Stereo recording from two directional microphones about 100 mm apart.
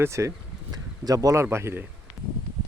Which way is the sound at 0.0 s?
30° right (ahead or behind).